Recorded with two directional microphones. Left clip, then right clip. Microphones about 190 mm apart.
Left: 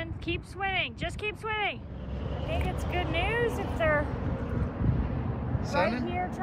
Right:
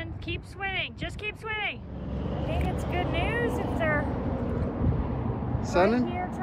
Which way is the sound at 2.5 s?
50° right (ahead or behind).